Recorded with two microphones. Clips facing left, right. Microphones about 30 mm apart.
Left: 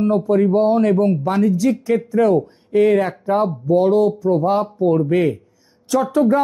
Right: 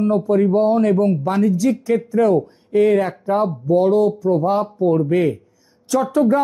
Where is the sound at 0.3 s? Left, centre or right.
Centre.